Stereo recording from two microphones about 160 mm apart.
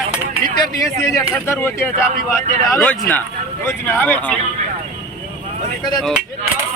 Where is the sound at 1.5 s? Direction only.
15° left (ahead or behind).